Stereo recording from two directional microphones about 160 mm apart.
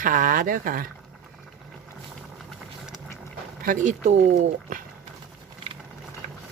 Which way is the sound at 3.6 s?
50° right (ahead or behind).